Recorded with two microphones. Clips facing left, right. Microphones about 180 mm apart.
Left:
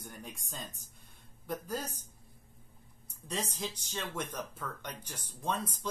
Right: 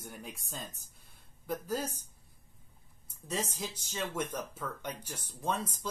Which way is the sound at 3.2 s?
10° right (ahead or behind).